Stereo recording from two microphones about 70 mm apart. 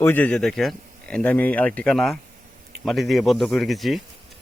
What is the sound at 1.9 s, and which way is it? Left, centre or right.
Speech, centre.